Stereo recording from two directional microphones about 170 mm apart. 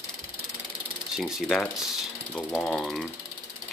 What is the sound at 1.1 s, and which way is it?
Speech, centre (ahead or behind).